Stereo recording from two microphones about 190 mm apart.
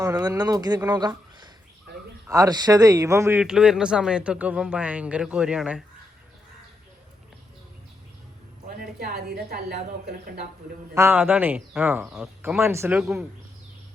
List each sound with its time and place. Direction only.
0.0 s speech: 20° right (ahead or behind)
2.3 s speech: 20° right (ahead or behind)
3.4 s speech: 5° right (ahead or behind)
8.8 s a woman's voice: 55° right (ahead or behind)
10.9 s speech: 10° right (ahead or behind)